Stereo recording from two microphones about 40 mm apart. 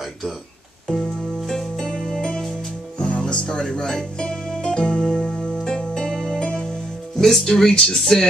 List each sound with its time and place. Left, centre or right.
0.8 s music: centre
3.0 s music: left
3.4 s speech: centre
4.6 s music: left; by 6.4 s centre
6.4 s music: left
7.2 s speech: centre